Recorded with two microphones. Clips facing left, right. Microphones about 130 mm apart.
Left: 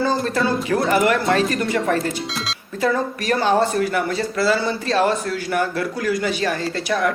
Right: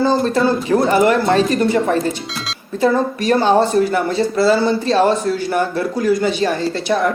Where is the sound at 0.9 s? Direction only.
30° right (ahead or behind).